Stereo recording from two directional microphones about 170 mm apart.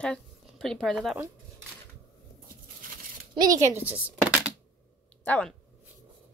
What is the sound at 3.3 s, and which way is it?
Speech, 20° right (ahead or behind).